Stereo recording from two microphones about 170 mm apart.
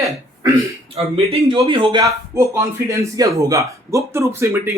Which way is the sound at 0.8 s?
35° right (ahead or behind).